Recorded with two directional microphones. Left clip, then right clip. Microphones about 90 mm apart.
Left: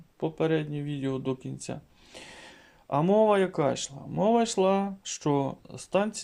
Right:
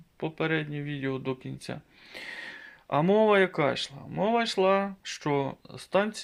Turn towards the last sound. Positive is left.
turn(degrees=25)  # may be behind; listen again after turning